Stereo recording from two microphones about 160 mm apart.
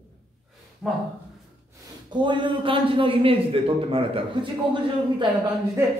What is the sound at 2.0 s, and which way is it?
A man's voice, 30° right (ahead or behind).